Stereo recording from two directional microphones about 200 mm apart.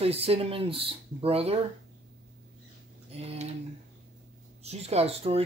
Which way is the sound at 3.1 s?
30° right (ahead or behind).